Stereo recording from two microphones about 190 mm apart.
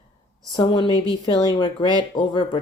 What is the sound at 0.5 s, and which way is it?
Speech, 25° left (ahead or behind).